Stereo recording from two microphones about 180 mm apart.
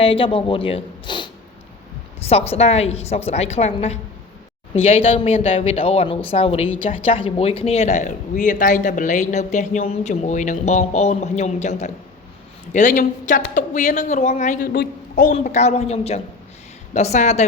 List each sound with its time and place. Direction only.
0.0 s a woman's voice: 30° left (ahead or behind)
14.7 s speech: 55° left (ahead or behind); by 17.4 s 40° left (ahead or behind)